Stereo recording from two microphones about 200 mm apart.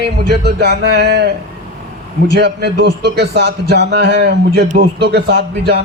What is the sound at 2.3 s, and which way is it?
A man's voice, 55° right (ahead or behind).